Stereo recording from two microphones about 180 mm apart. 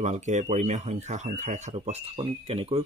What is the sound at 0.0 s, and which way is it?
Speech, 40° right (ahead or behind).